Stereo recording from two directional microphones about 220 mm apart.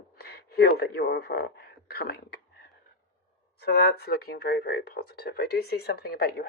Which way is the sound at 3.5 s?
45° left (ahead or behind).